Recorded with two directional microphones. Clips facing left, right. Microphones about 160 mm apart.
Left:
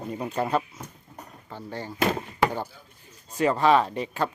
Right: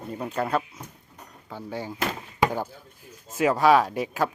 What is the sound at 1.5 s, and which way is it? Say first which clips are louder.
Speech: right 2 dB; 10° right (ahead or behind).